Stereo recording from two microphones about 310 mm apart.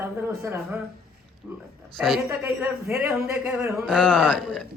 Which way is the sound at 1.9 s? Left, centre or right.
Centre.